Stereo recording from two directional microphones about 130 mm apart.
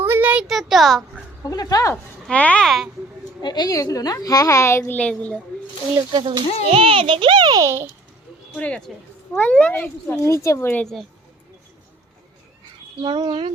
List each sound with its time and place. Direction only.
0.0 s speech: 15° right (ahead or behind); by 1.2 s centre (ahead or behind)
1.5 s a woman's voice: 25° left (ahead or behind)
2.2 s a child's voice: 10° left (ahead or behind)
3.4 s a woman's voice: 30° left (ahead or behind); by 5.4 s 10° left (ahead or behind)
6.1 s a child's voice: 35° right (ahead or behind)
6.7 s a child's voice: 45° right (ahead or behind); by 7.9 s 25° right (ahead or behind)
8.5 s speech: 10° left (ahead or behind)
10.2 s a woman's voice: 25° left (ahead or behind)
13.0 s a child's voice: 35° right (ahead or behind)